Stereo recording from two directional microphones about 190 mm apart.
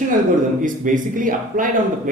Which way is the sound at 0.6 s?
45° right (ahead or behind).